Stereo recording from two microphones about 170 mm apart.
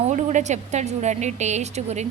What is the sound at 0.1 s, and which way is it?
A woman's voice, 45° right (ahead or behind).